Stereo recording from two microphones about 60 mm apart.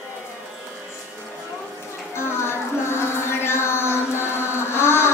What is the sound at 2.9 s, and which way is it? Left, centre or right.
Music, left.